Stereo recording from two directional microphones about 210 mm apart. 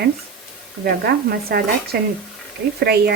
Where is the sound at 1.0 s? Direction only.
50° right (ahead or behind).